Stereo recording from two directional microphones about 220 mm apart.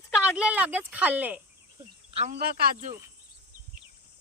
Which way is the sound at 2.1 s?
30° right (ahead or behind).